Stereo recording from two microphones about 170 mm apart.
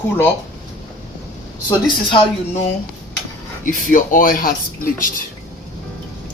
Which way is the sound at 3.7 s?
55° left (ahead or behind).